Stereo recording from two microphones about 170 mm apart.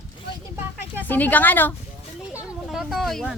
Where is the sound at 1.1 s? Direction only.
10° left (ahead or behind).